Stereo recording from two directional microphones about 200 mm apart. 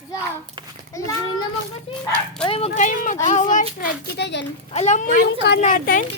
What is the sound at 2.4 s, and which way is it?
Speech, 30° left (ahead or behind).